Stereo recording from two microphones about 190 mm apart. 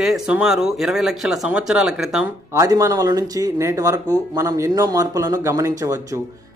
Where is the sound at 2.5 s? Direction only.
15° right (ahead or behind).